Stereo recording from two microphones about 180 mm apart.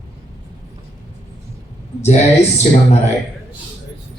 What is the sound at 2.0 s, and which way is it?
Speech, 40° left (ahead or behind).